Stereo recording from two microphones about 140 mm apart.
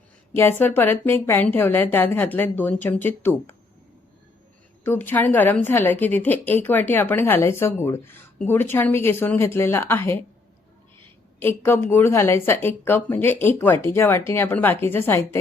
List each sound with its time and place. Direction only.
0.3 s a woman's voice: 15° left (ahead or behind)
4.9 s a woman's voice: 15° left (ahead or behind)
11.3 s a woman's voice: 15° left (ahead or behind)